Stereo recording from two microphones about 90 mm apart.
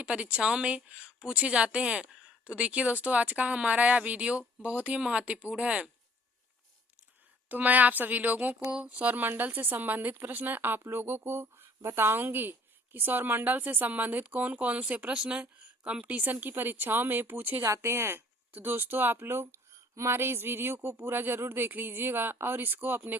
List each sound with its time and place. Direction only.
0.0 s a woman's voice: 10° right (ahead or behind)
7.4 s a woman's voice: 20° right (ahead or behind)
17.6 s a woman's voice: 30° right (ahead or behind)